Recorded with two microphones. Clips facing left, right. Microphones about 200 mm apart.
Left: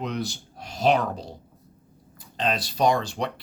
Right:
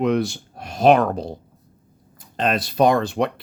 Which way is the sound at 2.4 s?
55° right (ahead or behind).